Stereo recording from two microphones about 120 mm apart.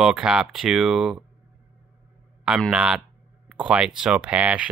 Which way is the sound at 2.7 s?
5° right (ahead or behind).